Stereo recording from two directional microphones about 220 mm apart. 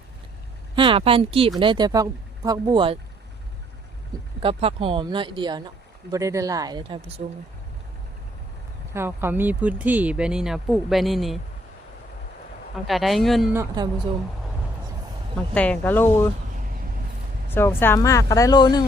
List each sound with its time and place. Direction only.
0.8 s speech: 25° right (ahead or behind)
4.4 s speech: 25° right (ahead or behind)
8.9 s speech: 10° right (ahead or behind)
12.9 s speech: centre (ahead or behind)
13.5 s speech: 10° right (ahead or behind)
15.5 s speech: 5° left (ahead or behind)
17.5 s speech: 10° left (ahead or behind)